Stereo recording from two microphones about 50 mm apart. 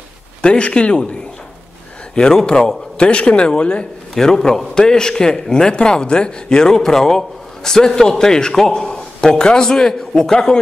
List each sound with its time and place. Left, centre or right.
0.4 s speech: left
2.1 s a man's voice: centre